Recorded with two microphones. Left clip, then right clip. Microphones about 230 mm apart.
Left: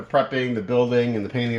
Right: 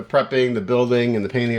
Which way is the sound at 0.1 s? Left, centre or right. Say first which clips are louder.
Right 3 dB; right.